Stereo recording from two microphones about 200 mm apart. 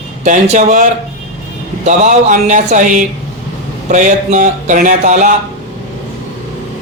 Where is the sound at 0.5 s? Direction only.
40° right (ahead or behind).